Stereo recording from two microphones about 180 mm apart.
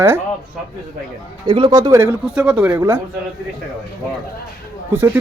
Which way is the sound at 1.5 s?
25° right (ahead or behind).